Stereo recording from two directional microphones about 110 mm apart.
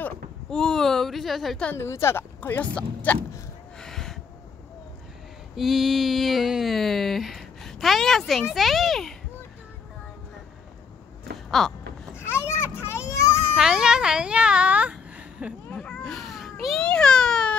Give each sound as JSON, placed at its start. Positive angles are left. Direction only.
{"t": 0.5, "sound": "speech", "side_deg": 5}
{"t": 1.7, "sound": "speech", "side_deg": 25}
{"t": 3.8, "sound": "gasp", "side_deg": 5}
{"t": 5.6, "sound": "speech", "side_deg": 0}
{"t": 11.6, "sound": "speech", "side_deg": 5}
{"t": 12.2, "sound": "children playing", "side_deg": 25}
{"t": 13.6, "sound": "speech", "side_deg": -5}
{"t": 15.7, "sound": "a sound", "side_deg": 10}